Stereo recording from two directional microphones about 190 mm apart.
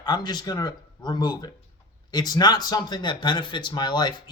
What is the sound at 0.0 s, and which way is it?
Speech, 20° left (ahead or behind).